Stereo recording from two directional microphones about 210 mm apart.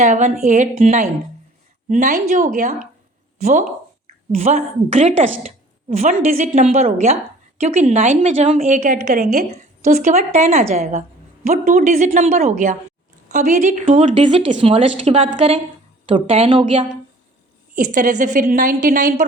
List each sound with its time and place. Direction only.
0.0 s a woman's voice: 35° right (ahead or behind)
17.7 s a woman's voice: 40° right (ahead or behind)